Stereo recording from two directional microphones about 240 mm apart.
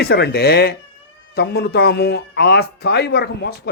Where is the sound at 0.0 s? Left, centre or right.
Left.